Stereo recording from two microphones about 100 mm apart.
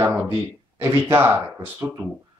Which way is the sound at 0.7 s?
25° right (ahead or behind).